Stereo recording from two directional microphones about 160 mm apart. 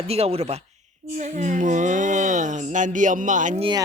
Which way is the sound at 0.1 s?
40° right (ahead or behind).